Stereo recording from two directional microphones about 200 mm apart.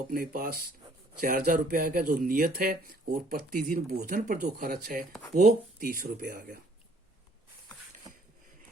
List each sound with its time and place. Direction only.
0.1 s speech: 45° right (ahead or behind)